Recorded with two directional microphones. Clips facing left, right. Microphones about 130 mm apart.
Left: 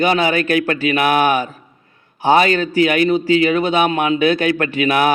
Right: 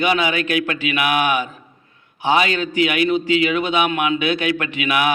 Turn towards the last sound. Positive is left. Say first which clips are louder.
# left 4 dB
turn(degrees=40)  # may be behind; listen again after turning